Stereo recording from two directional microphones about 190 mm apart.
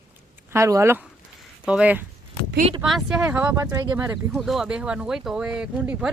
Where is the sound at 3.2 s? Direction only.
10° right (ahead or behind).